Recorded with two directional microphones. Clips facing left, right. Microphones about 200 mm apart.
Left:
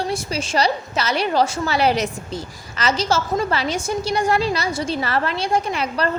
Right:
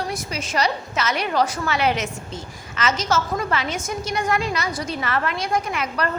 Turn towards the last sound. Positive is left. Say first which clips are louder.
# left 3 dB
turn(degrees=30)  # may be behind; listen again after turning